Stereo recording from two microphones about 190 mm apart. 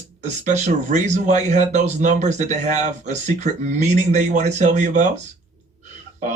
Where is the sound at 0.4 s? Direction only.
40° right (ahead or behind).